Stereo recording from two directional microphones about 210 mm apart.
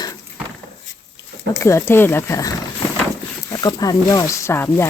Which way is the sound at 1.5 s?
15° left (ahead or behind).